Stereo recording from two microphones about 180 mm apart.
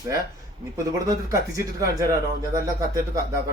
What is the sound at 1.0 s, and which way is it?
A man's voice, 20° right (ahead or behind).